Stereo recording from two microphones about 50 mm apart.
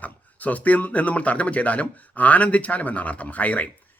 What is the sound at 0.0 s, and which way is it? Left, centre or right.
Speech, left.